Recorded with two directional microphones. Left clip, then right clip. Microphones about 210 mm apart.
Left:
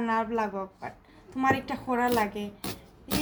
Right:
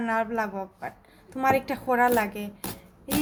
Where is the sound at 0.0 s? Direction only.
30° right (ahead or behind).